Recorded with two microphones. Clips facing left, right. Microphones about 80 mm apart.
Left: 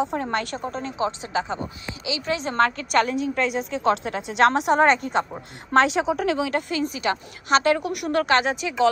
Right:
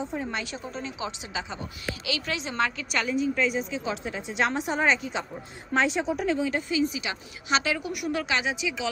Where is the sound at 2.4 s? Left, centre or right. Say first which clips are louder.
Left 7 dB; left.